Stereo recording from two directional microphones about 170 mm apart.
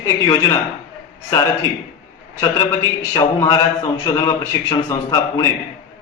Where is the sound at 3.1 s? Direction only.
20° left (ahead or behind).